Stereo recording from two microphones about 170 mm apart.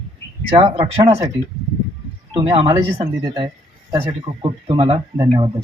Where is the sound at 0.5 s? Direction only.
30° right (ahead or behind).